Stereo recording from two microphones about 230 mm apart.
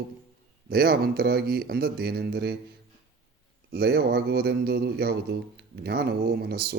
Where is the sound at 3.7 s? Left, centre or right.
Right.